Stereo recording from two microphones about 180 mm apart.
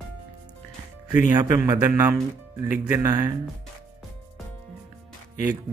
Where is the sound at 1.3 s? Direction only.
20° right (ahead or behind).